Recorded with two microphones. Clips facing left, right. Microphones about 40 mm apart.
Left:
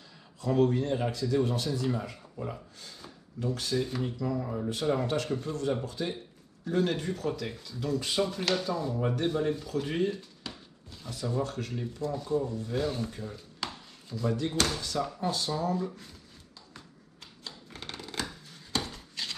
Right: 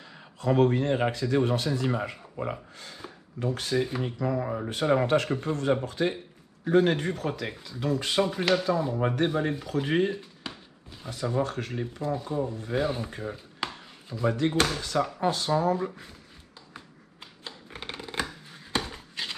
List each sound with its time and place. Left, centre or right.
0.4 s speech: right
10.1 s speech: right
13.6 s a sound: right
14.3 s speech: right
16.7 s shuffling cards: right